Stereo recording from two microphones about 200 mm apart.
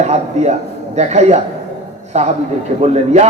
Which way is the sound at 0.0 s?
35° right (ahead or behind).